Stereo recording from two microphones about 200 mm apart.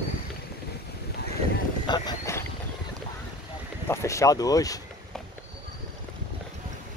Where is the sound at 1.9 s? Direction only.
15° left (ahead or behind).